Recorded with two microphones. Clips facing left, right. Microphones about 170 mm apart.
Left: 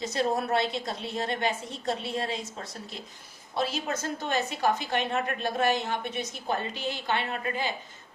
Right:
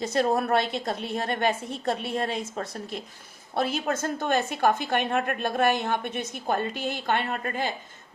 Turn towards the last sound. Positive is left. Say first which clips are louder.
# right 2 dB
turn(degrees=-50)  # may be behind; listen again after turning